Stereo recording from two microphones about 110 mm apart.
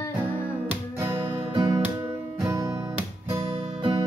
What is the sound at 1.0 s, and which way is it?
Guitar, 20° right (ahead or behind).